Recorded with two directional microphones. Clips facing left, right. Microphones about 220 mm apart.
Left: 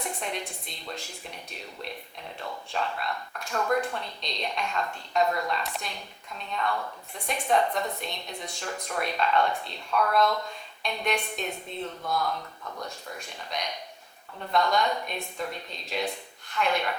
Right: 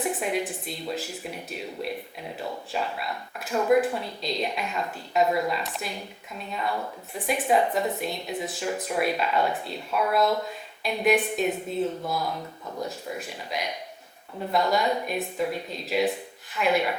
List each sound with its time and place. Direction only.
0.0 s a woman's voice: 5° right (ahead or behind)
12.3 s speech: 20° right (ahead or behind)
13.1 s speech: 5° right (ahead or behind)